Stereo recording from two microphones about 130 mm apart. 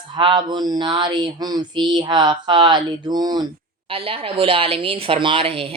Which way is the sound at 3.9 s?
45° right (ahead or behind).